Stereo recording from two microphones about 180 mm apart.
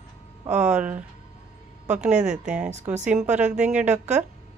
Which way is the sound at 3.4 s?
40° right (ahead or behind).